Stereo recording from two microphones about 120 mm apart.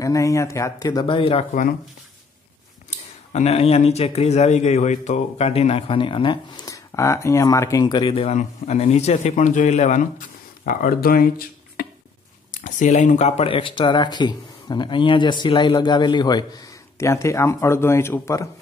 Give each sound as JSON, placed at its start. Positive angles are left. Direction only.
{"t": 0.0, "sound": "speech", "side_deg": 25}
{"t": 1.0, "sound": "speech", "side_deg": 45}
{"t": 3.3, "sound": "speech", "side_deg": 60}
{"t": 6.6, "sound": "speech", "side_deg": 25}
{"t": 8.0, "sound": "speech", "side_deg": 50}
{"t": 8.4, "sound": "speech", "side_deg": 70}
{"t": 12.4, "sound": "speech", "side_deg": 90}
{"t": 13.5, "sound": "speech", "side_deg": 45}
{"t": 17.0, "sound": "speech", "side_deg": 25}